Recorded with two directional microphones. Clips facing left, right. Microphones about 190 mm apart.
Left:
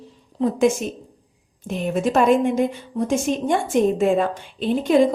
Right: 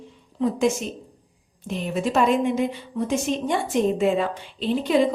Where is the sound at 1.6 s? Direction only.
50° left (ahead or behind).